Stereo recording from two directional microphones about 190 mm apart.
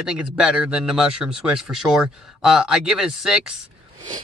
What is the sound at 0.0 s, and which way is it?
Speech, 5° right (ahead or behind).